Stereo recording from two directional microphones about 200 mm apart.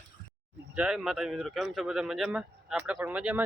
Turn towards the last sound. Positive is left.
turn(degrees=-5)  # may be behind; listen again after turning